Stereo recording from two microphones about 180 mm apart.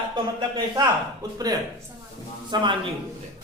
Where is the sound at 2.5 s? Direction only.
25° right (ahead or behind).